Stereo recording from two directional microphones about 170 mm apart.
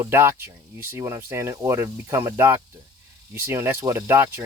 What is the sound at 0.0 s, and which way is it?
Speech, 15° right (ahead or behind).